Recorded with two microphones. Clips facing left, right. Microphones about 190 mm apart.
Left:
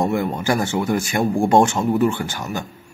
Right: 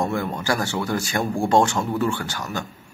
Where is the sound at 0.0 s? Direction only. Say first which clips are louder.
Left 4 dB; 20° left (ahead or behind).